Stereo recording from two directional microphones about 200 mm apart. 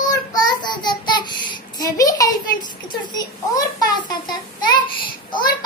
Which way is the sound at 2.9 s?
20° left (ahead or behind).